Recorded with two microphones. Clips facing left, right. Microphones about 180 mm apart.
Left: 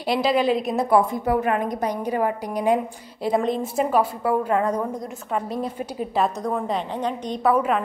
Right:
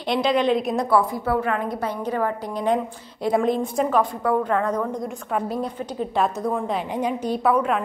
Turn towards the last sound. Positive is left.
turn(degrees=0)  # may be behind; listen again after turning